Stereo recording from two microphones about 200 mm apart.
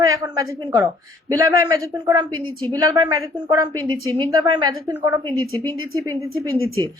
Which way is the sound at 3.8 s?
90° right.